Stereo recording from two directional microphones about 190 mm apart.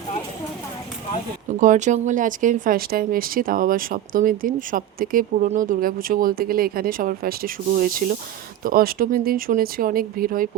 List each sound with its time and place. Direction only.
1.5 s speech: 40° right (ahead or behind)